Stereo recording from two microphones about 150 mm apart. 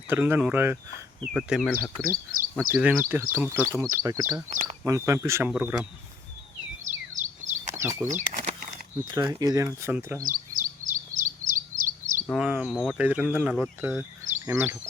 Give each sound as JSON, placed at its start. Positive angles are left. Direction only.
{"t": 0.1, "sound": "speech", "side_deg": -15}
{"t": 1.2, "sound": "speech", "side_deg": -5}
{"t": 2.0, "sound": "speech", "side_deg": -70}
{"t": 2.8, "sound": "speech", "side_deg": -15}
{"t": 4.4, "sound": "speech", "side_deg": -55}
{"t": 4.8, "sound": "speech", "side_deg": -20}
{"t": 6.8, "sound": "a sound", "side_deg": -55}
{"t": 7.8, "sound": "a sound", "side_deg": -15}
{"t": 8.1, "sound": "speech", "side_deg": -55}
{"t": 9.0, "sound": "speech", "side_deg": -25}
{"t": 10.2, "sound": "bird vocalization", "side_deg": -60}
{"t": 12.3, "sound": "speech", "side_deg": -5}